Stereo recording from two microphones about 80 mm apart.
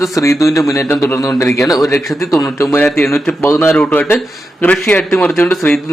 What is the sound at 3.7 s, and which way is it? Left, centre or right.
Speech, centre.